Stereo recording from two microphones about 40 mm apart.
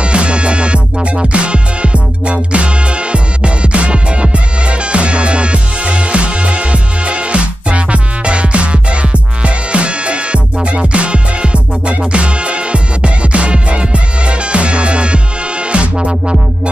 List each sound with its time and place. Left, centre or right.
0.0 s music: right